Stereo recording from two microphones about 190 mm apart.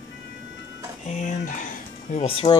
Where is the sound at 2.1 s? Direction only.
30° left (ahead or behind).